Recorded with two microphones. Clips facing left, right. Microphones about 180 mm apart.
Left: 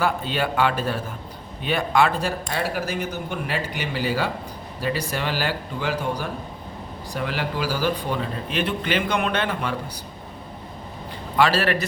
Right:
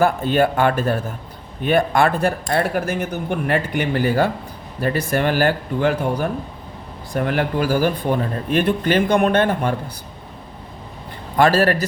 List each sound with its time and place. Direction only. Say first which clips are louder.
0.0 s speech: right 7 dB; 50° right (ahead or behind)
11.3 s speech: right 5 dB; 50° right (ahead or behind)